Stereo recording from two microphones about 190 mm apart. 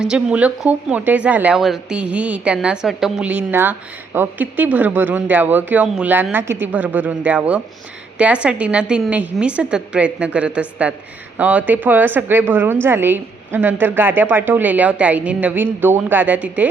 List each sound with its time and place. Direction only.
0.0 s speech: 5° right (ahead or behind)